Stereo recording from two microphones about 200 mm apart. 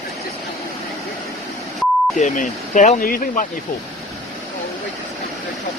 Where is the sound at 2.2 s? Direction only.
35° left (ahead or behind).